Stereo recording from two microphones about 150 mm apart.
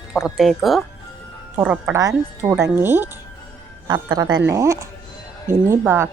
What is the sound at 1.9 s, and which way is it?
A woman's voice, 20° right (ahead or behind).